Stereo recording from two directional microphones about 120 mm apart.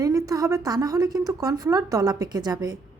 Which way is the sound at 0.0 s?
30° right (ahead or behind).